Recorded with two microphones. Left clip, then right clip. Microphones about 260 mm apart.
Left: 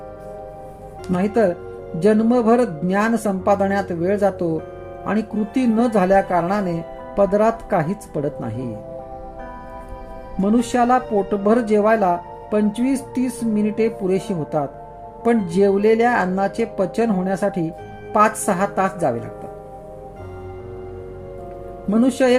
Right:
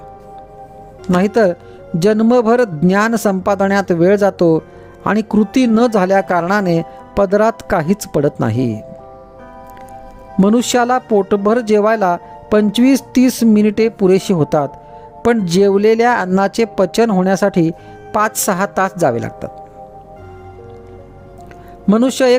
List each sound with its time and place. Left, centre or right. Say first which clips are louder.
1.1 s speech: right 5 dB; right
10.4 s speech: right 5 dB; right
21.8 s speech: right 5 dB; right